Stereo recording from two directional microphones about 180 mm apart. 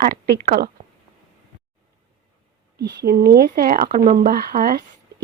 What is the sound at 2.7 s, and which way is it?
Speech, 60° right (ahead or behind).